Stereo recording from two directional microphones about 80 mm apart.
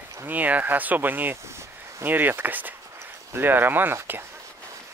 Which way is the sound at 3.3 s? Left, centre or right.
Right.